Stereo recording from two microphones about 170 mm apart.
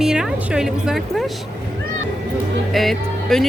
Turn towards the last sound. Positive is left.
turn(degrees=0)  # may be behind; listen again after turning